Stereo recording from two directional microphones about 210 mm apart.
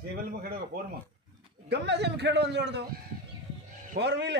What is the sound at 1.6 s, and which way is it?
A man's voice, 55° right (ahead or behind).